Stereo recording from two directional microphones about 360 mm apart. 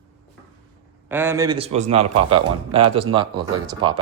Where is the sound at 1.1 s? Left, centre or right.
Centre.